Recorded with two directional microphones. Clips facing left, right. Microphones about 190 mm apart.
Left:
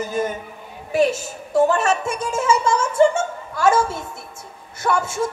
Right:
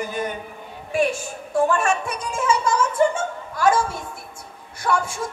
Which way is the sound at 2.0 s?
25° left (ahead or behind).